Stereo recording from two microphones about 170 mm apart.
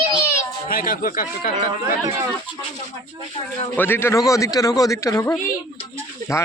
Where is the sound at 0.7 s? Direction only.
60° left (ahead or behind).